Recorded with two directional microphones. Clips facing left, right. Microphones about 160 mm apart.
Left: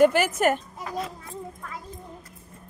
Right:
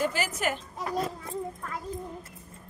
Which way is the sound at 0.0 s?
60° left (ahead or behind).